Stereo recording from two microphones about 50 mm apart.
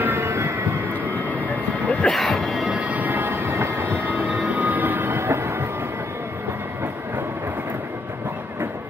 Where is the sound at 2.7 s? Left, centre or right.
Right.